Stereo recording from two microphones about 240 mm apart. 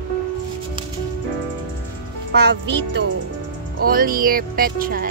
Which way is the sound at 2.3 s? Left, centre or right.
Right.